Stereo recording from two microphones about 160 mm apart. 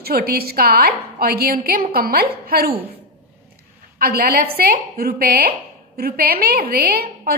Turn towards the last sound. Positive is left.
turn(degrees=-70)  # may be behind; listen again after turning